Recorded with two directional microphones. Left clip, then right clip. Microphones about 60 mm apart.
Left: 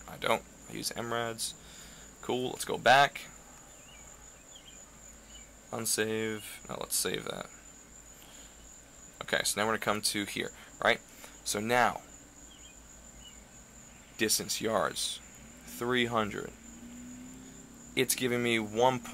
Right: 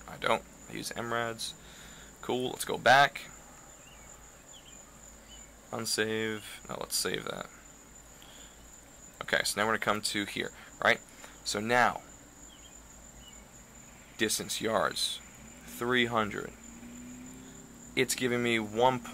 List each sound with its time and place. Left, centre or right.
0.0 s speech: left
5.7 s speech: left
9.2 s speech: left
14.1 s speech: left
17.9 s speech: left